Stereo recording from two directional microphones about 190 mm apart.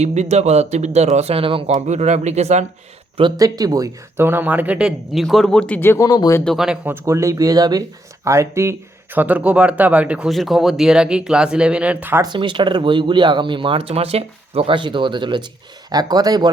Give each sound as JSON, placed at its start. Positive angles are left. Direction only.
{"t": 0.0, "sound": "speech", "side_deg": -35}
{"t": 3.2, "sound": "speech", "side_deg": -20}
{"t": 6.4, "sound": "speech", "side_deg": 0}
{"t": 12.3, "sound": "speech", "side_deg": -25}